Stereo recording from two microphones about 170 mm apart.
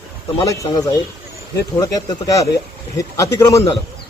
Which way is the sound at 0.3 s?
20° left (ahead or behind).